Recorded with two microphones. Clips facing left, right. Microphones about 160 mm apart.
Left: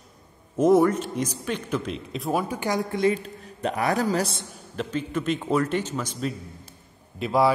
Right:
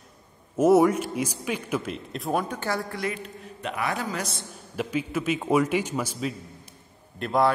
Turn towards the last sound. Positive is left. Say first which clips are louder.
# left 2 dB
turn(degrees=5)  # may be behind; listen again after turning